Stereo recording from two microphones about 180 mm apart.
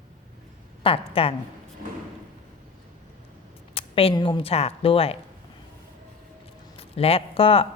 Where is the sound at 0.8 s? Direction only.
30° left (ahead or behind).